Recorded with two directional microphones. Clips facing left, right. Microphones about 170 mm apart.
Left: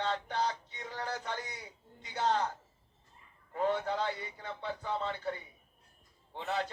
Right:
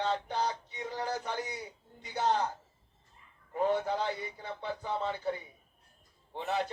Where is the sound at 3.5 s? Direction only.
15° right (ahead or behind).